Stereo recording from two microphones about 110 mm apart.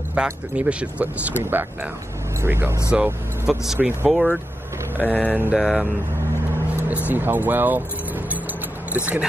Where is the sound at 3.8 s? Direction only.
15° right (ahead or behind).